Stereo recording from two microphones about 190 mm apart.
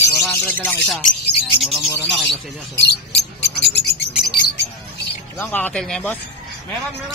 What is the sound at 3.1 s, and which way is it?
Mouse, 65° left (ahead or behind).